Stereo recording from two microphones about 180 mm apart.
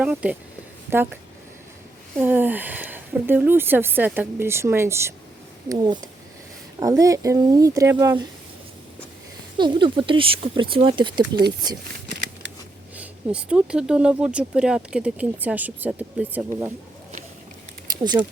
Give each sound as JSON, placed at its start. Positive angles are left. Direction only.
{"t": 0.0, "sound": "speech", "side_deg": -5}
{"t": 2.2, "sound": "speech", "side_deg": -10}
{"t": 9.6, "sound": "speech", "side_deg": -25}
{"t": 13.0, "sound": "speech", "side_deg": -5}